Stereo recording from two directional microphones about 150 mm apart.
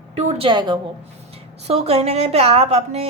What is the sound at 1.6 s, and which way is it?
A woman's voice, 45° right (ahead or behind).